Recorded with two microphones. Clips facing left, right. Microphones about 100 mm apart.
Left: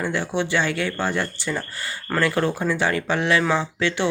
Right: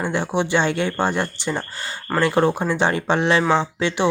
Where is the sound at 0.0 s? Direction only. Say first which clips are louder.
Right 2 dB; 20° right (ahead or behind).